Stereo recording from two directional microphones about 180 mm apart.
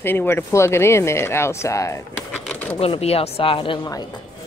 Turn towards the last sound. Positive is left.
turn(degrees=25)  # may be behind; listen again after turning